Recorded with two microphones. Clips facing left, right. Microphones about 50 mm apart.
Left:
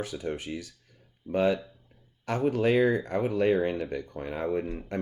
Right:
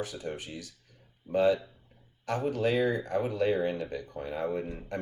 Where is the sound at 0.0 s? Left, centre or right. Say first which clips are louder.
Left 3 dB; left.